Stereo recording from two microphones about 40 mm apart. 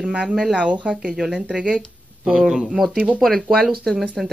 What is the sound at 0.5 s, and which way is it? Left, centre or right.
Speech, right.